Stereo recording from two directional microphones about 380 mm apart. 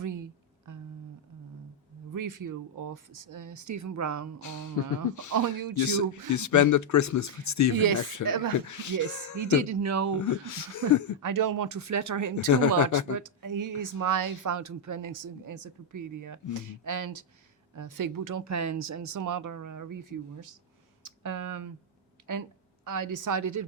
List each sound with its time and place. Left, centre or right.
2.1 s speech: right
5.3 s speech: right
5.7 s speech: left
9.4 s speech: right
10.2 s speech: left
11.2 s speech: right
12.5 s speech: left
13.1 s a woman's voice: right